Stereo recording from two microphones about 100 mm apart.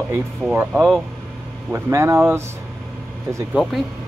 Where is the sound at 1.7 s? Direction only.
25° right (ahead or behind).